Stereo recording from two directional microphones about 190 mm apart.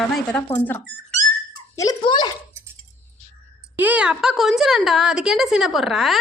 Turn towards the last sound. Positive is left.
turn(degrees=0)  # may be behind; listen again after turning